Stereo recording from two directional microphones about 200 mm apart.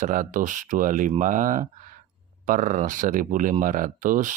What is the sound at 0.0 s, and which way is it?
Speech, 40° right (ahead or behind).